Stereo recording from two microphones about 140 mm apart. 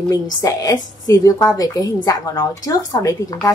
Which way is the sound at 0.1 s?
25° left (ahead or behind).